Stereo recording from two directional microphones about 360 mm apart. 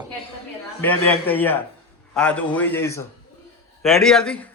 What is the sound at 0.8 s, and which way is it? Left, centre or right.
A man's voice, centre.